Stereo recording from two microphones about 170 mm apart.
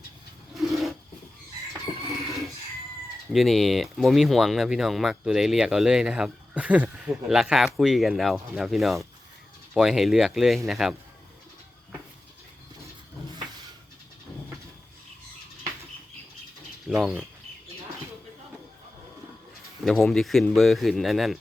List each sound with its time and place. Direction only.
0.5 s a sound: centre (ahead or behind)
3.3 s speech: centre (ahead or behind)
16.8 s speech: centre (ahead or behind)
19.8 s speech: centre (ahead or behind)